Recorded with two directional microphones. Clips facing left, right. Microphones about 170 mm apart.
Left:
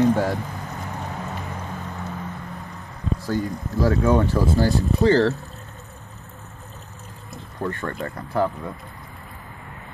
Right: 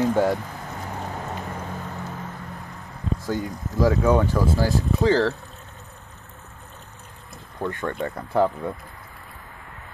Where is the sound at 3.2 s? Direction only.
15° right (ahead or behind).